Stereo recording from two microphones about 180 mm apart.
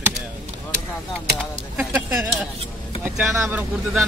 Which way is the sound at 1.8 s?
10° right (ahead or behind).